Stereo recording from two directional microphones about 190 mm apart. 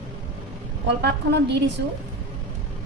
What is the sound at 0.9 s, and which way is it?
Speech, 65° right (ahead or behind).